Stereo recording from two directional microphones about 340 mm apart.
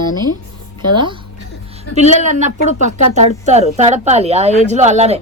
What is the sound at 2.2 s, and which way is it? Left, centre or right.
Speech, right.